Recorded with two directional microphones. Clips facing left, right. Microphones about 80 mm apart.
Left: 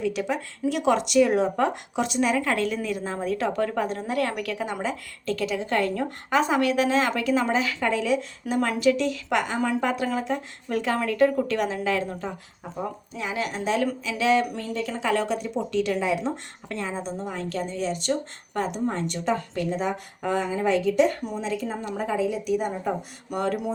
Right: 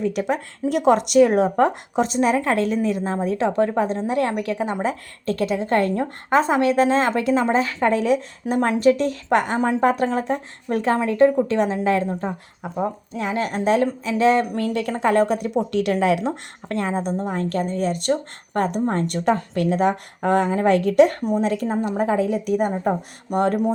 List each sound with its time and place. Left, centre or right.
0.1 s a woman's voice: right
4.8 s a woman's voice: right
14.5 s a woman's voice: right
16.2 s speech: right